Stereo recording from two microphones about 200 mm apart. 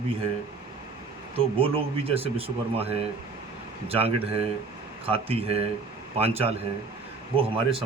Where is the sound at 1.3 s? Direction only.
30° right (ahead or behind).